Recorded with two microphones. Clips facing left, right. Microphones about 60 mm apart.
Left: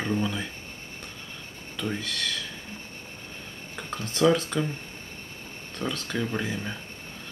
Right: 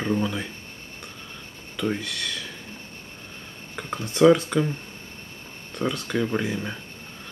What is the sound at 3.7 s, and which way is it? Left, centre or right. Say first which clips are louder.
Speech: right 3 dB; centre.